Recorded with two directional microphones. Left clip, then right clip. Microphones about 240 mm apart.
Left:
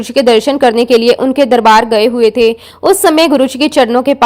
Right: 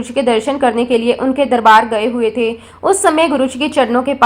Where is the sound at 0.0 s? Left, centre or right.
Left.